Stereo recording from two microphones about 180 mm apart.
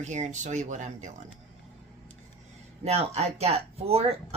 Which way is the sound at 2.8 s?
35° right (ahead or behind).